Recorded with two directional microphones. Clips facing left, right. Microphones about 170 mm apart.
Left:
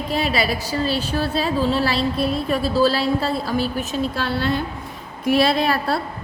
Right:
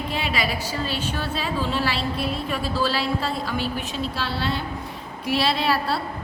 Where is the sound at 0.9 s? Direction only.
35° left (ahead or behind).